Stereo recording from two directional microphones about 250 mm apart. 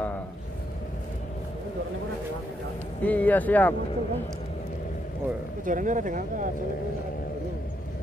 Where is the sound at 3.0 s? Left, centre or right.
Centre.